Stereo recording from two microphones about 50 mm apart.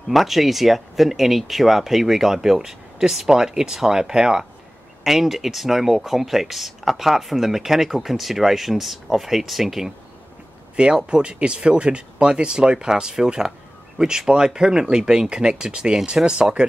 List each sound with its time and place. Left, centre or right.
0.1 s speech: centre
10.8 s speech: centre